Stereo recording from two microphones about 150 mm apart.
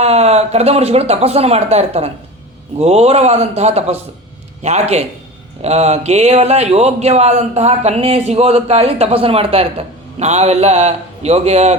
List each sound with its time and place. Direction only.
0.0 s speech: 45° right (ahead or behind)